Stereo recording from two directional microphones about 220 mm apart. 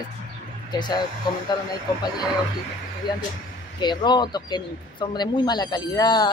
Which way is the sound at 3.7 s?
20° left (ahead or behind).